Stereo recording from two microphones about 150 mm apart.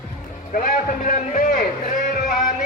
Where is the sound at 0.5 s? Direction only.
65° left (ahead or behind).